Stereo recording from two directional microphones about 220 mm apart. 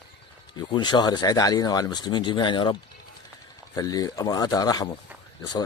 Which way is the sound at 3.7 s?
15° left (ahead or behind).